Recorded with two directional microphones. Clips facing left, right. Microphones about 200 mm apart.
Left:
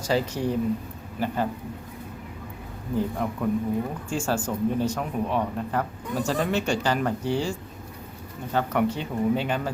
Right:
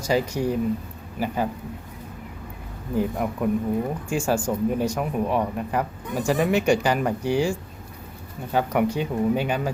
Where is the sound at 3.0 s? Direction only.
10° right (ahead or behind).